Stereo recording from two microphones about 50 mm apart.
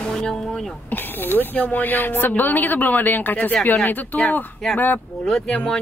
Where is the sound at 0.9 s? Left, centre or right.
Left.